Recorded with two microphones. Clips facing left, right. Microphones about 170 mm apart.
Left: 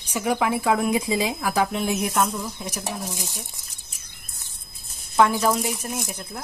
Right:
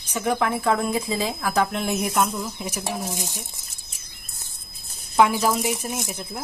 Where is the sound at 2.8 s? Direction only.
20° right (ahead or behind).